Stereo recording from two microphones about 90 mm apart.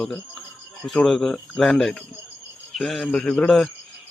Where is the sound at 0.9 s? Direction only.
5° left (ahead or behind).